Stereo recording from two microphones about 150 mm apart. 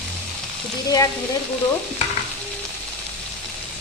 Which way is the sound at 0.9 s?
25° left (ahead or behind).